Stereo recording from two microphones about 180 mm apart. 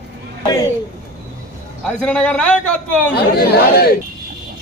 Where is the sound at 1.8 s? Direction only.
5° left (ahead or behind).